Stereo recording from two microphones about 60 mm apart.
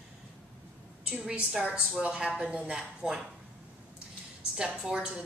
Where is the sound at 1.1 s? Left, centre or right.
Centre.